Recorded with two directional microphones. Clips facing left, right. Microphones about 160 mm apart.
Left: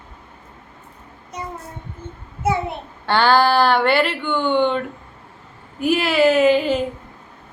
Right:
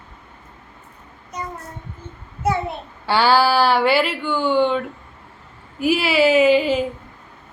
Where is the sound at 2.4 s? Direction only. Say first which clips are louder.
Even; 20° left (ahead or behind).